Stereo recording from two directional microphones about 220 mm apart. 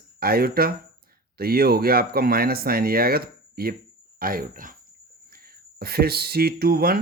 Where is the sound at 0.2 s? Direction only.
45° right (ahead or behind).